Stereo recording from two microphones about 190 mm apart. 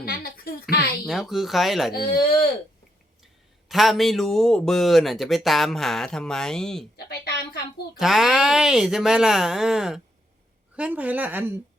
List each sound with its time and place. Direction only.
0.0 s a sound: 55° left (ahead or behind)
1.0 s a man's voice: centre (ahead or behind)
1.9 s speech: 55° left (ahead or behind)
3.7 s a man's voice: centre (ahead or behind)
6.9 s a sound: 60° left (ahead or behind)
7.9 s a man's voice: centre (ahead or behind)